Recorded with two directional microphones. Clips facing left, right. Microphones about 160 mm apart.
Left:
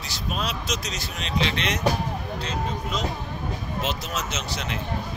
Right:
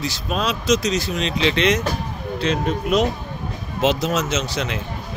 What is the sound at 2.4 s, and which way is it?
Speech, 75° right (ahead or behind).